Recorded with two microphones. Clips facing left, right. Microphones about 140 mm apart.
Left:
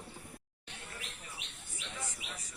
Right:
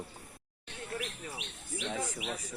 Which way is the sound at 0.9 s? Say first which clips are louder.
Right 13 dB; 70° right (ahead or behind).